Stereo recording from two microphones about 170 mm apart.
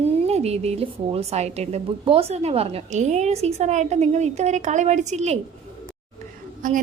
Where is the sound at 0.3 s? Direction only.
40° right (ahead or behind).